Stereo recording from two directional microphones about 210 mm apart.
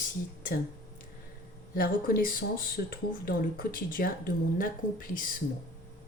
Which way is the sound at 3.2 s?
40° left (ahead or behind).